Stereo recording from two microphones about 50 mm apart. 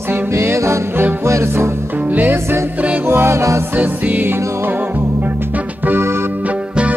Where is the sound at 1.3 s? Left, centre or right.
Right.